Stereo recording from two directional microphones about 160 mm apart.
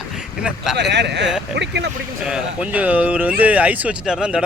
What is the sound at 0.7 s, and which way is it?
Speech, 90° right.